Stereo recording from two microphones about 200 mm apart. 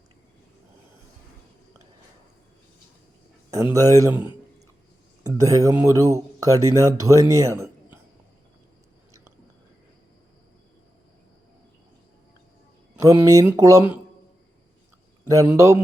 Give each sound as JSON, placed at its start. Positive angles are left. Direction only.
{"t": 3.5, "sound": "speech", "side_deg": -15}
{"t": 4.1, "sound": "speech", "side_deg": 25}
{"t": 5.2, "sound": "speech", "side_deg": -15}
{"t": 13.0, "sound": "speech", "side_deg": -15}
{"t": 15.2, "sound": "speech", "side_deg": -15}